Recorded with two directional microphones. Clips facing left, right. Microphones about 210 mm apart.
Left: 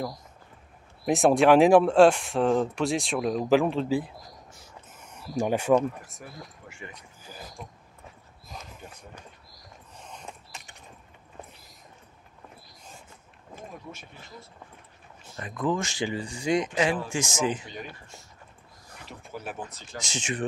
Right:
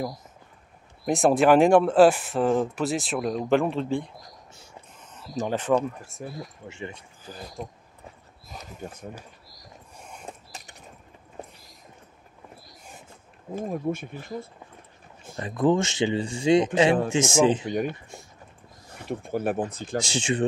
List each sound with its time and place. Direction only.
1.0 s speech: centre (ahead or behind)
5.8 s speech: 25° right (ahead or behind)
8.5 s a sound: centre (ahead or behind)
9.9 s mechanisms: 10° right (ahead or behind)
13.6 s speech: 50° right (ahead or behind)
15.3 s speech: 30° right (ahead or behind)
17.6 s speech: 55° right (ahead or behind)
19.0 s speech: 55° right (ahead or behind)
20.0 s speech: 30° right (ahead or behind)